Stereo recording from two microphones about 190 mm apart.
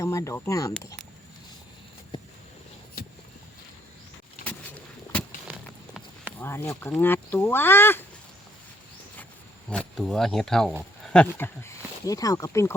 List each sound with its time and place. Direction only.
0.0 s speech: 15° left (ahead or behind)
5.5 s a sound: 5° right (ahead or behind)
6.4 s speech: 10° left (ahead or behind)
9.6 s speech: 5° left (ahead or behind)